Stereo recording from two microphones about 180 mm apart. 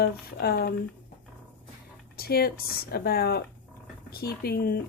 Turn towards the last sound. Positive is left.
turn(degrees=60)  # may be behind; listen again after turning